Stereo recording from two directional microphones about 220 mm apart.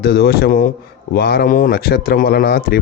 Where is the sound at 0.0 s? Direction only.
50° left (ahead or behind).